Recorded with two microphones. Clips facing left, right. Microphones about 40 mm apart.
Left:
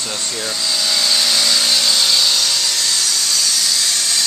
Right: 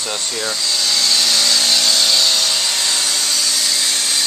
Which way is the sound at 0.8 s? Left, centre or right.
Centre.